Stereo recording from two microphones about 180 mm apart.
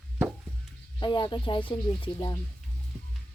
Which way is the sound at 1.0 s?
25° left (ahead or behind).